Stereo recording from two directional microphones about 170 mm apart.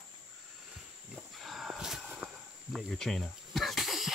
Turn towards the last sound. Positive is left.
turn(degrees=0)  # may be behind; listen again after turning